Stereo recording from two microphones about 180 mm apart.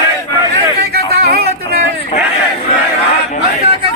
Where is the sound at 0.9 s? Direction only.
60° right (ahead or behind).